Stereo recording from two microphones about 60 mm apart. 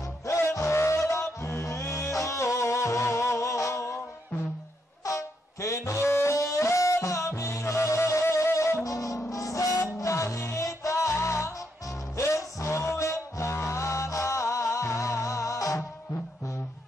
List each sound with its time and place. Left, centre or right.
0.3 s music: left
5.0 s music: left